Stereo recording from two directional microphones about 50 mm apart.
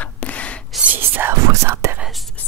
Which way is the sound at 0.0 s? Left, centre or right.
Left.